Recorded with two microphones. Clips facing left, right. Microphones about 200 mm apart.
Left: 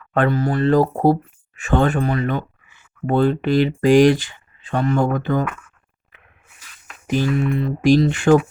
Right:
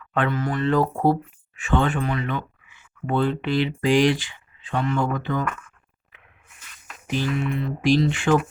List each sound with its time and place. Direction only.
0.1 s speech: 40° left (ahead or behind)
7.1 s music: 45° left (ahead or behind)